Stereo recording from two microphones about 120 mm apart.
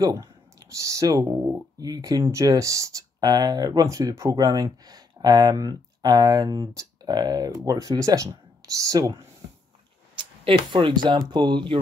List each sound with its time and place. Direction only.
0.0 s speech: 35° right (ahead or behind)
1.9 s speech: 35° right (ahead or behind)
4.4 s speech: 35° right (ahead or behind)
10.1 s speech: 45° right (ahead or behind)